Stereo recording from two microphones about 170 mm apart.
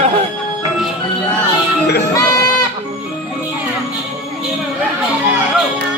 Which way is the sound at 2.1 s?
20° left (ahead or behind).